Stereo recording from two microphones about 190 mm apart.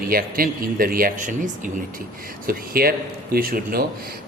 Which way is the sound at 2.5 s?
50° right (ahead or behind).